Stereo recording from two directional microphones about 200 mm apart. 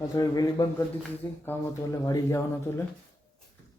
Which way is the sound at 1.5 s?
15° left (ahead or behind).